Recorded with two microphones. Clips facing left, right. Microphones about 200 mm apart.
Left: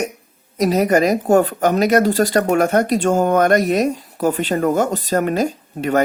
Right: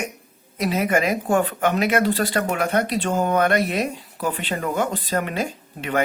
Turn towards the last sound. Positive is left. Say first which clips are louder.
# left 6 dB
turn(degrees=40)  # may be behind; listen again after turning